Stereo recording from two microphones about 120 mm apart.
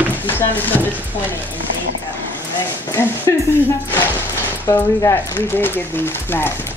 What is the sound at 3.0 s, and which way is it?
Speech, 20° left (ahead or behind).